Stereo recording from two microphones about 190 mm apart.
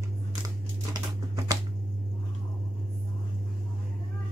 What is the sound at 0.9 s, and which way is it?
Crumpling, 20° right (ahead or behind).